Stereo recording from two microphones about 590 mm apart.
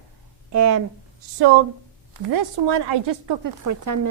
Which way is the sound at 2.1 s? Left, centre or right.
Right.